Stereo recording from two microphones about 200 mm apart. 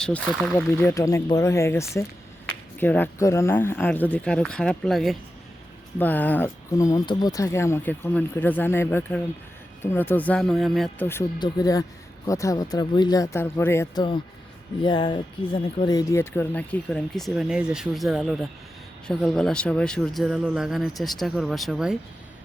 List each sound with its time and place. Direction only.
0.3 s speech: centre (ahead or behind)
0.5 s speech: 15° left (ahead or behind)
11.1 s speech: 15° left (ahead or behind); by 21.9 s centre (ahead or behind)